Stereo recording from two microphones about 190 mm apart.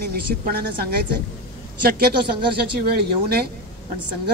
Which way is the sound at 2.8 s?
55° right (ahead or behind).